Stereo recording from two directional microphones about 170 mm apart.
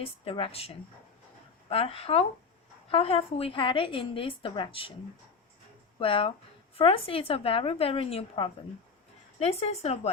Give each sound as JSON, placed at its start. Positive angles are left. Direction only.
{"t": 0.0, "sound": "a woman's voice", "side_deg": 35}
{"t": 6.0, "sound": "a woman's voice", "side_deg": 30}